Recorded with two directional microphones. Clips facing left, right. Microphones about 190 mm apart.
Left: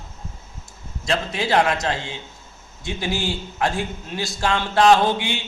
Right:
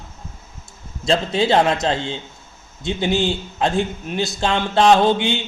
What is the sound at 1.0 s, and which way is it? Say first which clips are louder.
Mantra: right 6 dB; 30° right (ahead or behind).